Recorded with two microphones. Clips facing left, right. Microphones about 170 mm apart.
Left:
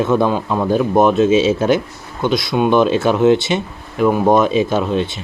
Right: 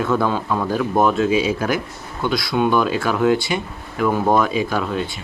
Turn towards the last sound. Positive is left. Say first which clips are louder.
# left 5 dB
turn(degrees=20)  # may be behind; listen again after turning